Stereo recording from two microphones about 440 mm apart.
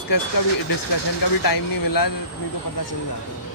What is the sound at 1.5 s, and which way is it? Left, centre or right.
Speech, left.